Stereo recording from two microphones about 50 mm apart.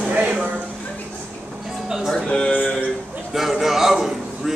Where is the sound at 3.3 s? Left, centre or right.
Centre.